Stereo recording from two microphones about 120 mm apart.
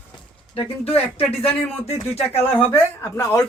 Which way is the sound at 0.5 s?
55° left (ahead or behind).